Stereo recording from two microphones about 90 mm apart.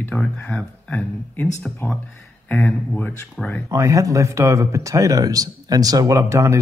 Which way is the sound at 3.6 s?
35° right (ahead or behind).